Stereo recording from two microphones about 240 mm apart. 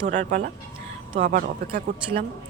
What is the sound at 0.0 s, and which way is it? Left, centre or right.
Speech, right.